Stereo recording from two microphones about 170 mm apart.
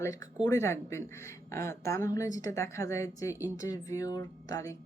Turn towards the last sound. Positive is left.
turn(degrees=20)  # may be behind; listen again after turning